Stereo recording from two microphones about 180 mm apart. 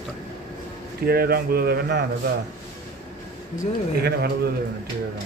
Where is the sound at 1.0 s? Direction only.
55° right (ahead or behind).